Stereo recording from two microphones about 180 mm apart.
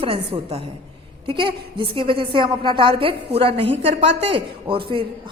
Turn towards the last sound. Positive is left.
turn(degrees=-30)  # may be behind; listen again after turning